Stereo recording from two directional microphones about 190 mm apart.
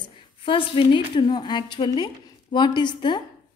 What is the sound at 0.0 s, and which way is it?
A woman's voice, 25° left (ahead or behind).